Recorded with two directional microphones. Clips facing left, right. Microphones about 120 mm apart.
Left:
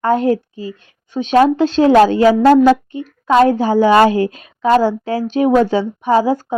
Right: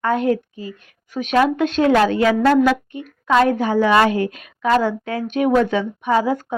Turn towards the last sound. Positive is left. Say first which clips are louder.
# left 4 dB
turn(degrees=30)  # may be behind; listen again after turning